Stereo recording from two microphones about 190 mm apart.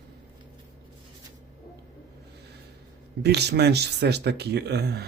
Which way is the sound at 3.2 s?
60° right (ahead or behind).